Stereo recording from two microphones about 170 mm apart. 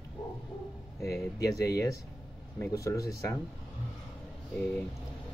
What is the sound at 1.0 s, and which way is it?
Speech, 15° left (ahead or behind).